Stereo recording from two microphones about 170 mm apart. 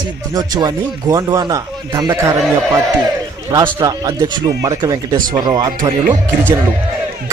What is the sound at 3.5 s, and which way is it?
Speech, 25° right (ahead or behind).